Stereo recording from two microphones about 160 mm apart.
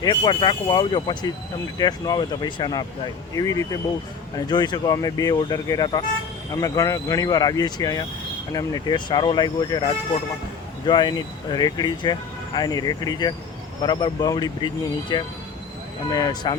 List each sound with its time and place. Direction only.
0.0 s speech: 25° left (ahead or behind)